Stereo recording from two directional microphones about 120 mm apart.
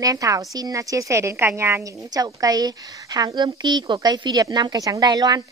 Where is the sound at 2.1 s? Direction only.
30° right (ahead or behind).